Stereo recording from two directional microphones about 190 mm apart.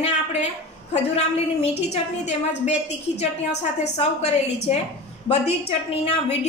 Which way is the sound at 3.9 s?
35° left (ahead or behind).